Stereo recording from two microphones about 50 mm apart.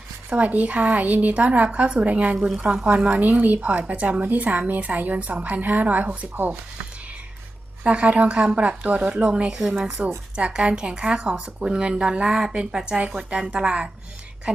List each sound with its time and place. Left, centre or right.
0.3 s a woman's voice: right
2.6 s speech: centre
2.8 s a woman's voice: right
7.9 s speech: right